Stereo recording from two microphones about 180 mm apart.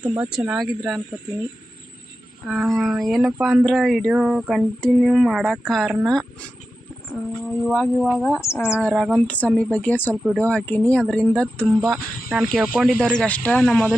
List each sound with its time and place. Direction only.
0.0 s speech: 5° right (ahead or behind)
2.5 s speech: centre (ahead or behind)
7.8 s speech: centre (ahead or behind)
8.4 s a woman's voice: 15° left (ahead or behind)
8.8 s speech: centre (ahead or behind)
9.2 s a woman's voice: 10° left (ahead or behind)
11.6 s speech: 5° right (ahead or behind)